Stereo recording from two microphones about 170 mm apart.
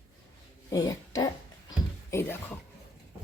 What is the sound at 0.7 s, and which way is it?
Speech, 20° left (ahead or behind).